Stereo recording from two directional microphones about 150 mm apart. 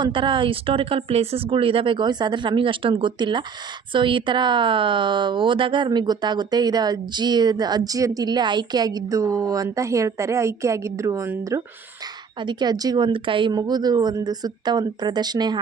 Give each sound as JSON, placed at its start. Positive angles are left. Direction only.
{"t": 0.0, "sound": "a woman's voice", "side_deg": -35}
{"t": 12.4, "sound": "a woman's voice", "side_deg": -30}